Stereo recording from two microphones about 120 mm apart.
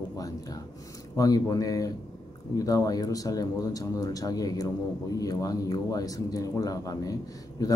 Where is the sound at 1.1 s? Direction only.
30° left (ahead or behind).